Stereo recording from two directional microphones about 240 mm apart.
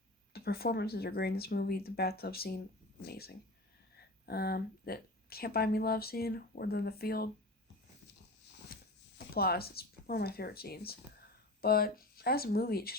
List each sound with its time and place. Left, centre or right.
0.3 s speech: left
8.7 s speech: left